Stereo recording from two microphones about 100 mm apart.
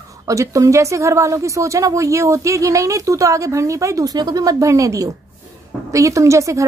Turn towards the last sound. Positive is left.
turn(degrees=-30)  # may be behind; listen again after turning